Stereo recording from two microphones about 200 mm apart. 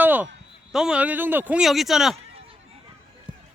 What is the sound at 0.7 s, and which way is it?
A man's voice, 5° right (ahead or behind).